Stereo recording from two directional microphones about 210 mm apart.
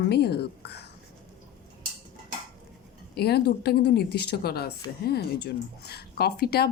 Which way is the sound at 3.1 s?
50° left (ahead or behind).